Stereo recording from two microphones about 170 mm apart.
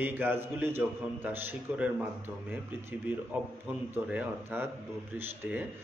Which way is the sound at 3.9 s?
10° right (ahead or behind).